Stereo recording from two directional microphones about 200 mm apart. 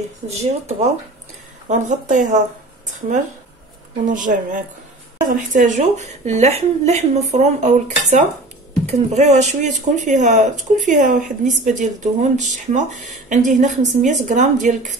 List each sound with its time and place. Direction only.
0.3 s speech: 35° right (ahead or behind)
4.0 s speech: 40° right (ahead or behind)